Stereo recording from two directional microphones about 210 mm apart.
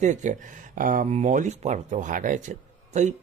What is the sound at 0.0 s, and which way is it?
Speech, 35° right (ahead or behind).